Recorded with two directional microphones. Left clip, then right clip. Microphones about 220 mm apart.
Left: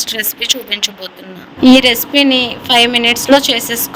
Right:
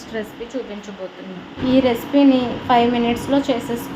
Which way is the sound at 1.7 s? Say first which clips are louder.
Left 8 dB; 45° left (ahead or behind).